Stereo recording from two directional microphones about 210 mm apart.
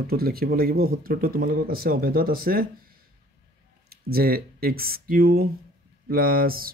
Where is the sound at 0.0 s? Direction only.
45° right (ahead or behind).